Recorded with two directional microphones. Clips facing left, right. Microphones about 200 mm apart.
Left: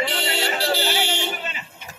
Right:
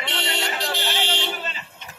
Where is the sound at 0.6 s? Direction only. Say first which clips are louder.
Left 5 dB; 35° left (ahead or behind).